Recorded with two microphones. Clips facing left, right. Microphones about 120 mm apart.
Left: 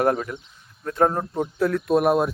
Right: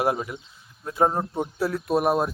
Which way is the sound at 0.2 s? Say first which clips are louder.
Left 2 dB; 10° right (ahead or behind).